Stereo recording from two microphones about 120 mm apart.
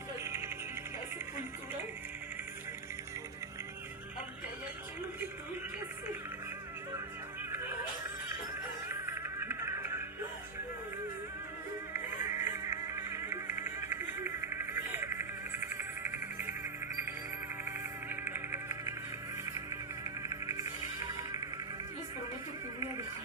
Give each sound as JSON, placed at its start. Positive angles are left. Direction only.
{"t": 0.3, "sound": "music", "side_deg": -20}
{"t": 8.9, "sound": "music", "side_deg": -20}
{"t": 12.2, "sound": "a sound", "side_deg": 90}
{"t": 12.5, "sound": "music", "side_deg": -25}